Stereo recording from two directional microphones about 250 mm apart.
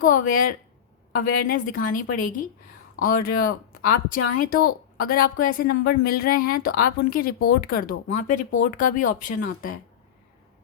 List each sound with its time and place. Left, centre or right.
0.0 s a woman's voice: left